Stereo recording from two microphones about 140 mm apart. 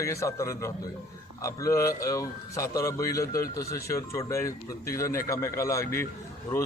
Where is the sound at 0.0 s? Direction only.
20° left (ahead or behind).